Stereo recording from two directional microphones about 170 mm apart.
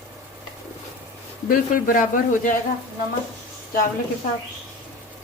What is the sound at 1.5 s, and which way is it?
Speech, 55° left (ahead or behind).